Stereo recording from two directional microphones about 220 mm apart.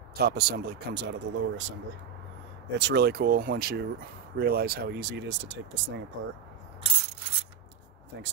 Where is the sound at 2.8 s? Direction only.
50° right (ahead or behind).